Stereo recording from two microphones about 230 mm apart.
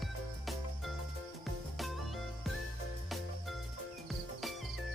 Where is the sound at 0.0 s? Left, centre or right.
Centre.